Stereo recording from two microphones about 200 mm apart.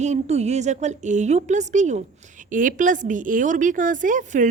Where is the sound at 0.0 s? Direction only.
35° right (ahead or behind).